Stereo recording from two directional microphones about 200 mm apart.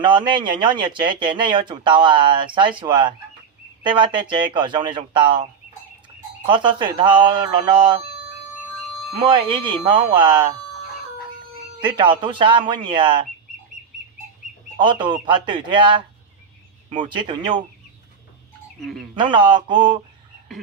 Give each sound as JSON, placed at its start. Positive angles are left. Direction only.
{"t": 0.0, "sound": "speech", "side_deg": -25}
{"t": 9.8, "sound": "speech", "side_deg": -25}
{"t": 11.8, "sound": "speech", "side_deg": -25}
{"t": 14.8, "sound": "speech", "side_deg": -25}
{"t": 18.8, "sound": "speech", "side_deg": 0}
{"t": 19.1, "sound": "speech", "side_deg": -25}